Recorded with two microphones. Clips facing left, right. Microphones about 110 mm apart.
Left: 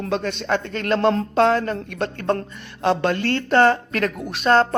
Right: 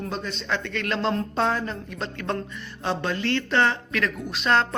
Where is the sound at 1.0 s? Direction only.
70° left (ahead or behind).